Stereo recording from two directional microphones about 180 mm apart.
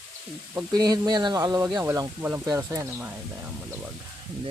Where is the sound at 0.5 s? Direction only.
20° right (ahead or behind).